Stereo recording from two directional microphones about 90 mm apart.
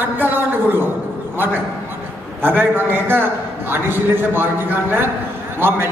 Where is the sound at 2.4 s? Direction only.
25° right (ahead or behind).